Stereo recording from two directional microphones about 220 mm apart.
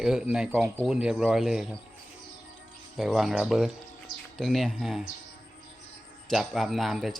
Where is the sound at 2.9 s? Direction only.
Centre (ahead or behind).